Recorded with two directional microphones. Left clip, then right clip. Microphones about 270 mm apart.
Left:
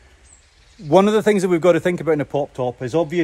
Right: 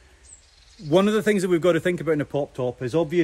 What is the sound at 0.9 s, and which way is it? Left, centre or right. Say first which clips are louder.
Speech: left 5 dB; centre.